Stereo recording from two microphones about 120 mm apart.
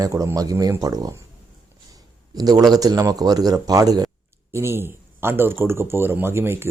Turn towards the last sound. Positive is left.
turn(degrees=-20)  # may be behind; listen again after turning